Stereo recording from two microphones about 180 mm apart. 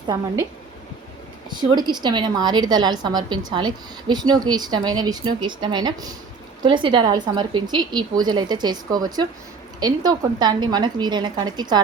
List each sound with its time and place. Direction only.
1.5 s a woman's voice: 25° right (ahead or behind)